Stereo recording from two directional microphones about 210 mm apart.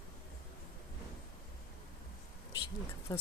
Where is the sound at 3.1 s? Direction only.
20° left (ahead or behind).